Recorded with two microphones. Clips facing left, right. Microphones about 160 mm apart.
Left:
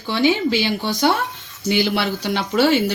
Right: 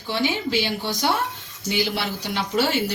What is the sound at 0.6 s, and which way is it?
Speech, 65° left (ahead or behind).